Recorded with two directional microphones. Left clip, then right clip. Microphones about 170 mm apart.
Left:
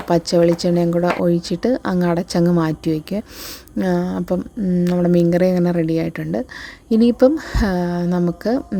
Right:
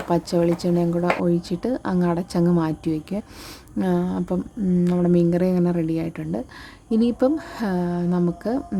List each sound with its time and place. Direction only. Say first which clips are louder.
0.1 s speech: left 6 dB; 15° left (ahead or behind)